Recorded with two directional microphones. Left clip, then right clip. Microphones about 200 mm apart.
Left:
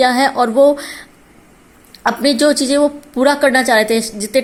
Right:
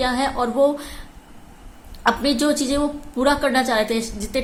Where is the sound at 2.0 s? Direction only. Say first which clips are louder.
Left 6 dB; 40° left (ahead or behind).